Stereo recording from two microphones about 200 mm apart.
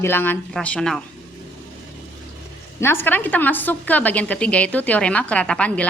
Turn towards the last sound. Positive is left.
turn(degrees=5)  # may be behind; listen again after turning